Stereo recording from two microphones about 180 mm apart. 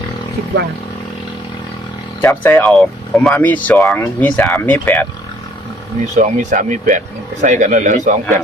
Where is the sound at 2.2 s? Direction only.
10° left (ahead or behind).